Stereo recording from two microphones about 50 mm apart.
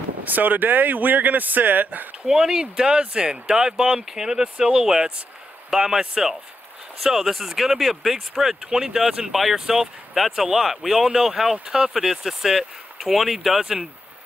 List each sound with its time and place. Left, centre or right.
0.2 s speech: right
2.2 s speech: centre
9.3 s speech: centre
11.5 s speech: centre